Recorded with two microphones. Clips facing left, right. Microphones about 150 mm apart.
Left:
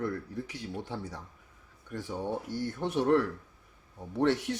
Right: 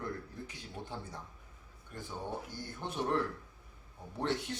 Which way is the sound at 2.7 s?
70° left (ahead or behind).